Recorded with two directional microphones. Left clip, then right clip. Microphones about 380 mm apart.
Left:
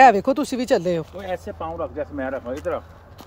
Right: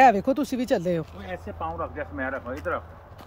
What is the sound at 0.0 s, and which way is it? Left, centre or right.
Speech, centre.